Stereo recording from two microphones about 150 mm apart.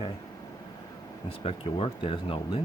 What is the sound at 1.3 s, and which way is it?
Speech, 40° left (ahead or behind).